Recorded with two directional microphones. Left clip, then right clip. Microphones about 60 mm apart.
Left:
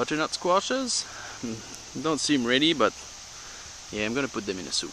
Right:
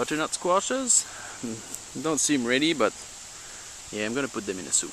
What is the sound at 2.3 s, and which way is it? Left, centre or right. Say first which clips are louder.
Speech: left 2 dB; centre.